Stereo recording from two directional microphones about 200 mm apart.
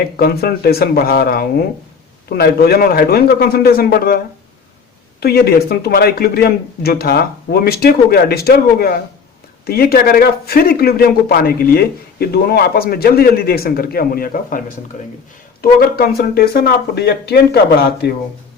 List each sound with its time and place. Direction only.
0.0 s speech: 50° left (ahead or behind)
5.2 s speech: 50° left (ahead or behind)
15.6 s speech: 50° left (ahead or behind)